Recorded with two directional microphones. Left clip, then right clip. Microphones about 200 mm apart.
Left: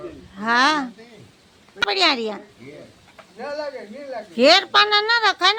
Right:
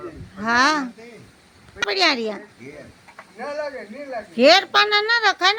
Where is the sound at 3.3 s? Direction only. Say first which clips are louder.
Right 1 dB; 15° left (ahead or behind).